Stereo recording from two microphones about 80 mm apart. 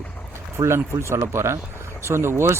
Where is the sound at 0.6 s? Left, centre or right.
Right.